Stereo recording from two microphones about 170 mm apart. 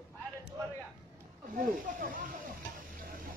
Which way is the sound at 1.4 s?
55° right (ahead or behind).